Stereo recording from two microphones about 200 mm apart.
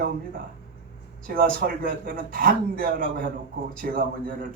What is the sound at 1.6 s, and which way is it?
A man's voice, 45° right (ahead or behind).